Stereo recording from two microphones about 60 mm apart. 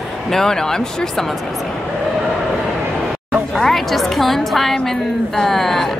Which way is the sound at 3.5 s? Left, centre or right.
Centre.